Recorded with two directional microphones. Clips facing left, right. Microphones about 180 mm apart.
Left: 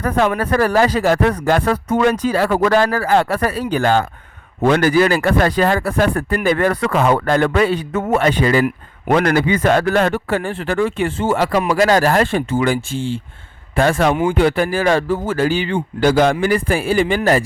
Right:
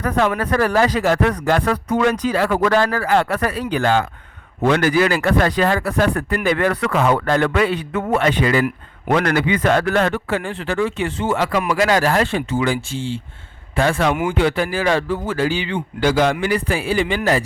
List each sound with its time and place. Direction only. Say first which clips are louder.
0.3 s speech: left 2 dB; 35° left (ahead or behind)
3.7 s speech: left 2 dB; 45° left (ahead or behind)
10.4 s speech: left 2 dB; 50° left (ahead or behind)
14.1 s speech: left 3 dB; 30° left (ahead or behind)
14.3 s speech: left 3 dB; 50° left (ahead or behind)